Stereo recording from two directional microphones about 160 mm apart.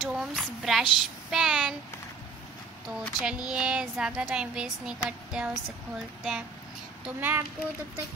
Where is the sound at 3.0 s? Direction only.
Centre (ahead or behind).